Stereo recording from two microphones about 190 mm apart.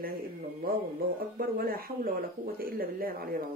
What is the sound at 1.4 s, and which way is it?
Speech, 50° right (ahead or behind).